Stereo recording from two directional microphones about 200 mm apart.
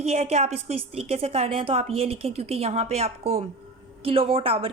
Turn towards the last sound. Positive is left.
turn(degrees=-30)  # may be behind; listen again after turning